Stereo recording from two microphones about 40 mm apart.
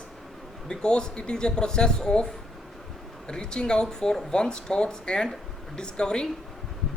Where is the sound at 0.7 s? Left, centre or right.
Left.